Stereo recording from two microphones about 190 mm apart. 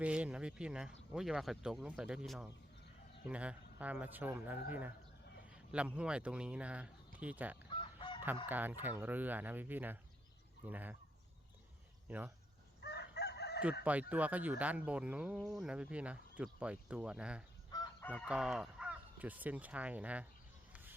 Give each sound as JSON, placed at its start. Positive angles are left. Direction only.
{"t": 0.0, "sound": "speech", "side_deg": -5}
{"t": 7.7, "sound": "chicken", "side_deg": 25}
{"t": 8.4, "sound": "speech", "side_deg": -10}
{"t": 12.0, "sound": "speech", "side_deg": -10}
{"t": 12.8, "sound": "chicken", "side_deg": 60}
{"t": 14.1, "sound": "speech", "side_deg": -10}
{"t": 17.7, "sound": "chicken", "side_deg": 20}
{"t": 18.3, "sound": "speech", "side_deg": -5}